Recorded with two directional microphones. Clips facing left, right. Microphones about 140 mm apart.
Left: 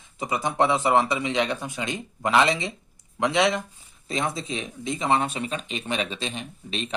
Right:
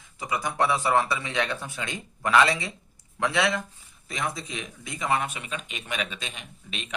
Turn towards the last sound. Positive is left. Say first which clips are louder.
# left 7 dB
turn(degrees=35)  # may be behind; listen again after turning